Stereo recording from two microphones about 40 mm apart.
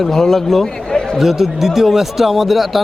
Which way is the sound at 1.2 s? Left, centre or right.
Centre.